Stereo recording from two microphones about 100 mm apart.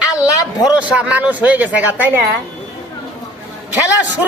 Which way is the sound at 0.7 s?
10° right (ahead or behind).